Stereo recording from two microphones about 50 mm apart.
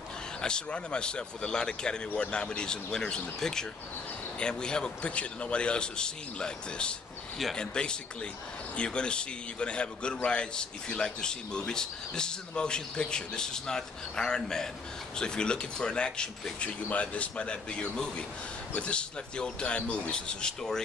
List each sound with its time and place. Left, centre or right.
0.4 s a man's voice: centre